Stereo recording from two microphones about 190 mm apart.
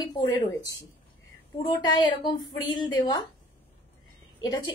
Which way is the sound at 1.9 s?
25° left (ahead or behind).